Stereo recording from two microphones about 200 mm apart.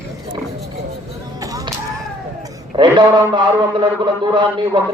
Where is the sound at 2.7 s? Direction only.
25° right (ahead or behind).